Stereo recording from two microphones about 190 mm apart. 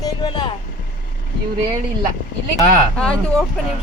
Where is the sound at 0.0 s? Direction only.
25° left (ahead or behind).